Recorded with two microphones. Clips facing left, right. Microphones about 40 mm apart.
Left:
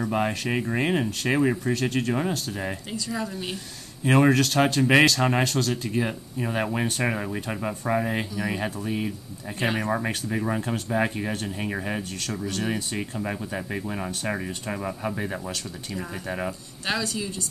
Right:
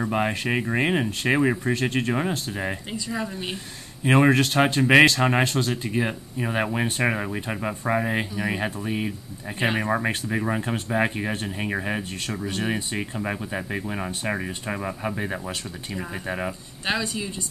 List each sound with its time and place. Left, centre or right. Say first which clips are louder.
0.0 s speech: right 1 dB; centre